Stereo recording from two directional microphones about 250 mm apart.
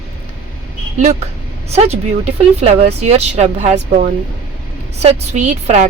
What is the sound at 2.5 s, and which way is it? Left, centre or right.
A woman's voice, right.